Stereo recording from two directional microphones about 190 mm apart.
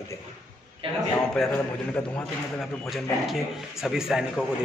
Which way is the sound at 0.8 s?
30° right (ahead or behind).